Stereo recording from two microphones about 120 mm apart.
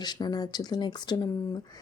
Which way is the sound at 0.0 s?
35° left (ahead or behind).